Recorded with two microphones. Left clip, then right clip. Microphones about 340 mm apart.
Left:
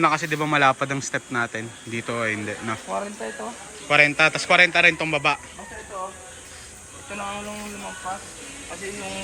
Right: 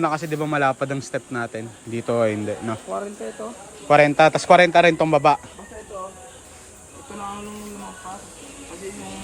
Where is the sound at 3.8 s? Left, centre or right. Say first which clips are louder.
Right 3 dB; centre.